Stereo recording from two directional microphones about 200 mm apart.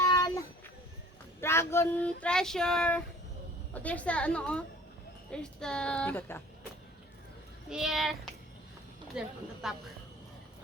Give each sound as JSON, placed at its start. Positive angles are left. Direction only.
{"t": 0.0, "sound": "a sound", "side_deg": 20}
{"t": 1.4, "sound": "child singing", "side_deg": 10}
{"t": 7.7, "sound": "child singing", "side_deg": 0}